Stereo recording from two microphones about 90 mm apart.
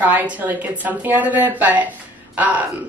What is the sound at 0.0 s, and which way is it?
A woman's voice, 20° right (ahead or behind).